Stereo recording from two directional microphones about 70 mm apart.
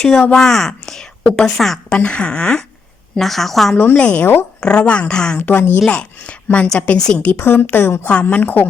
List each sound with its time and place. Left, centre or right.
0.3 s speech: centre
2.0 s speech: centre
3.2 s a woman's voice: centre
3.9 s speech: centre
5.4 s a woman's voice: left
5.9 s a woman's voice: centre
7.3 s a woman's voice: left
8.1 s a woman's voice: left